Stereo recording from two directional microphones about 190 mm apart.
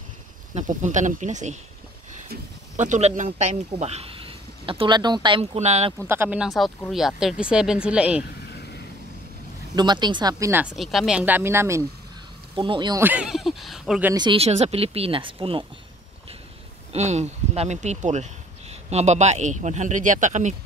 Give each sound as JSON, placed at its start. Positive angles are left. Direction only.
{"t": 0.6, "sound": "speech", "side_deg": -40}
{"t": 2.7, "sound": "speech", "side_deg": -40}
{"t": 6.0, "sound": "speech", "side_deg": -10}
{"t": 9.8, "sound": "speech", "side_deg": -25}
{"t": 10.8, "sound": "speech", "side_deg": 0}
{"t": 12.5, "sound": "speech", "side_deg": -25}
{"t": 13.0, "sound": "speech", "side_deg": -5}
{"t": 14.1, "sound": "speech", "side_deg": -25}
{"t": 16.9, "sound": "speech", "side_deg": -35}